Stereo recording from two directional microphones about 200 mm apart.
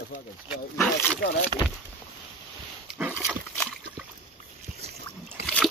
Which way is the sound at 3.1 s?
10° left (ahead or behind).